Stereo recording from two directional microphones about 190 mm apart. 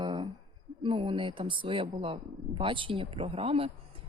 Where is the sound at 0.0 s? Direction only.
25° right (ahead or behind).